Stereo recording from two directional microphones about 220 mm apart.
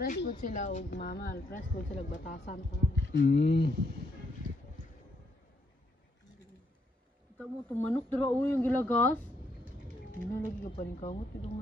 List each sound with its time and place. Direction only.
0.0 s a woman's voice: 45° left (ahead or behind)
0.9 s speech: 45° left (ahead or behind)
1.6 s a woman's voice: 35° left (ahead or behind)
2.3 s speech: 50° left (ahead or behind)
7.3 s speech: 10° left (ahead or behind)
10.4 s a woman's voice: 35° left (ahead or behind)